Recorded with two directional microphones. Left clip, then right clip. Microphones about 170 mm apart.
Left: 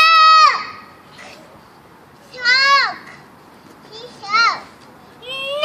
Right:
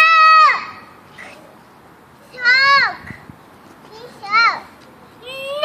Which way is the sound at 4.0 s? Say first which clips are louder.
Right 1 dB; 10° left (ahead or behind).